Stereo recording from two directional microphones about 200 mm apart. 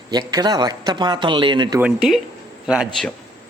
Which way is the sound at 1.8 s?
5° right (ahead or behind).